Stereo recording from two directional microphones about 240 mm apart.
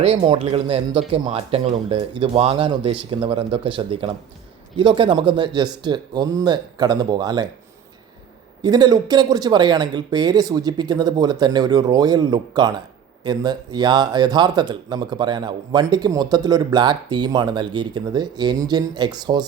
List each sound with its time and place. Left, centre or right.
0.0 s speech: right
8.6 s speech: centre